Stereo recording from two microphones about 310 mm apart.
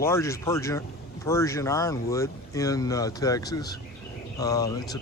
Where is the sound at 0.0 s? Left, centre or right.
Centre.